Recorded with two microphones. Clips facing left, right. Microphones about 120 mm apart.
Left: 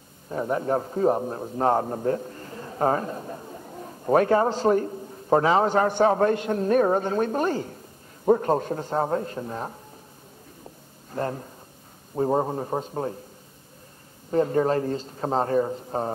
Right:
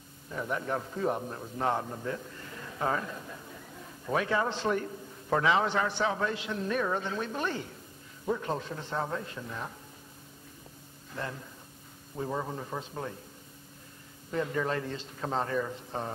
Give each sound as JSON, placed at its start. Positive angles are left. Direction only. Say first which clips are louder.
{"t": 0.3, "sound": "a man's voice", "louder": "left 8 dB", "side_deg": 35}
{"t": 11.1, "sound": "a man's voice", "louder": "left 9 dB", "side_deg": 45}
{"t": 14.3, "sound": "a man's voice", "louder": "left 9 dB", "side_deg": 40}